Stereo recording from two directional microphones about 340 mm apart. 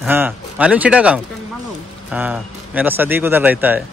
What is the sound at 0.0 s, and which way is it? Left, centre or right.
Speech, centre.